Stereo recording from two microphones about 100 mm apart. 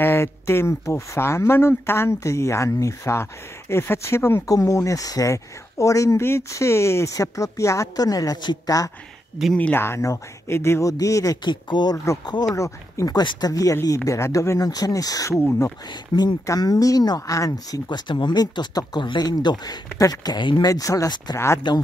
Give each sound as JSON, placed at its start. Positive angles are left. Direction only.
{"t": 0.0, "sound": "speech", "side_deg": 25}
{"t": 9.6, "sound": "speech", "side_deg": 20}
{"t": 11.4, "sound": "speech", "side_deg": 45}
{"t": 12.5, "sound": "speech", "side_deg": 30}
{"t": 13.5, "sound": "speech", "side_deg": 35}
{"t": 15.9, "sound": "speech", "side_deg": 50}
{"t": 16.4, "sound": "speech", "side_deg": 40}
{"t": 17.8, "sound": "speech", "side_deg": 50}
{"t": 20.6, "sound": "speech", "side_deg": 35}